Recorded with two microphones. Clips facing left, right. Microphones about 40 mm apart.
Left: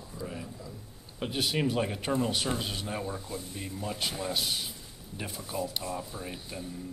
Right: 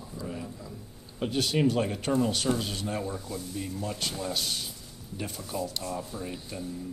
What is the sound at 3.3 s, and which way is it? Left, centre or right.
Speech, left.